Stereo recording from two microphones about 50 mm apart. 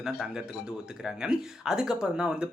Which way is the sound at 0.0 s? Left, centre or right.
Centre.